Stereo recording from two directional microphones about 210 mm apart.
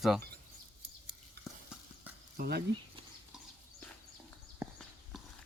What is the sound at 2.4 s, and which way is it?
Speech, 50° right (ahead or behind).